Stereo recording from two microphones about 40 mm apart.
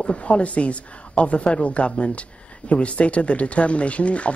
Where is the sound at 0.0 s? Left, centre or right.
Left.